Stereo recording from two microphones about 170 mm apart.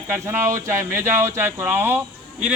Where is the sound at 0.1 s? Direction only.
15° right (ahead or behind).